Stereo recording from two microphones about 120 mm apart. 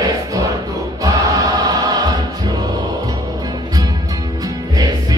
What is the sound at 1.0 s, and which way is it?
Choir, 30° right (ahead or behind).